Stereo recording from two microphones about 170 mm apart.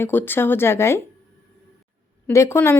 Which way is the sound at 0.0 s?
10° left (ahead or behind).